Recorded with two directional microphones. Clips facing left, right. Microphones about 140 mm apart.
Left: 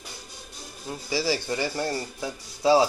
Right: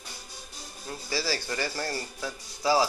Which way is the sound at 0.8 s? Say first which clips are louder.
Left 5 dB; 15° left (ahead or behind).